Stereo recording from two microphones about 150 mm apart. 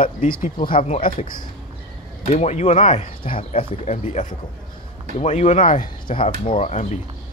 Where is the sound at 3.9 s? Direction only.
55° left (ahead or behind); by 6.3 s 35° left (ahead or behind).